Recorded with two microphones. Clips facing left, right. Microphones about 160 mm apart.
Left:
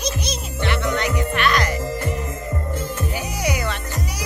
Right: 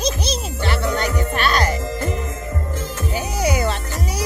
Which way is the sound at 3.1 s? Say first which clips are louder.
Right 7 dB; 30° right (ahead or behind).